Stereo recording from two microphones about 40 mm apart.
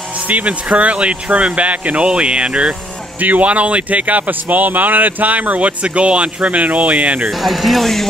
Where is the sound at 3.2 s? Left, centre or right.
Right.